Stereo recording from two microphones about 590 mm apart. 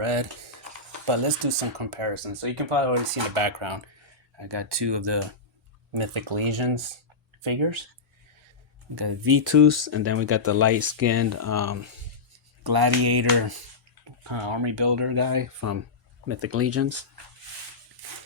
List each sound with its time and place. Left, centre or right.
0.0 s speech: right
9.0 s speech: right
12.6 s mantra: right
14.3 s speech: right